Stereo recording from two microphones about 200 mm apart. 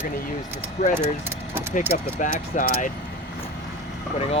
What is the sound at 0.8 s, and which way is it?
Speech, 30° left (ahead or behind).